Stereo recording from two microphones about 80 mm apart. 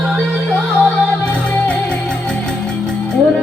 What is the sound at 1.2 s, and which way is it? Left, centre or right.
Music, centre.